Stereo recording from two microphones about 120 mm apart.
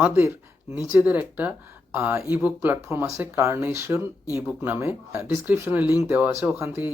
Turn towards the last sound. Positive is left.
turn(degrees=-15)  # may be behind; listen again after turning